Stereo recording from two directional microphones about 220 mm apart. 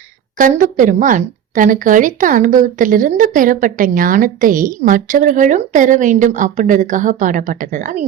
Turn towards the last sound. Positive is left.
turn(degrees=-35)  # may be behind; listen again after turning